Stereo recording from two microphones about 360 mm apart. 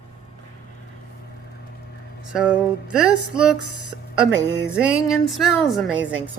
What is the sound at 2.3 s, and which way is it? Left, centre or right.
Speech, centre.